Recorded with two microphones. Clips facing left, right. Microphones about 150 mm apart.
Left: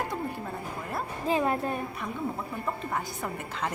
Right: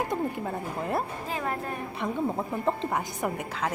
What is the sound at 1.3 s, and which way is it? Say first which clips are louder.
Speech: left 8 dB; 20° left (ahead or behind).